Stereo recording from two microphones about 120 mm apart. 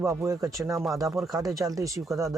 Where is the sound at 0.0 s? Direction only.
25° right (ahead or behind).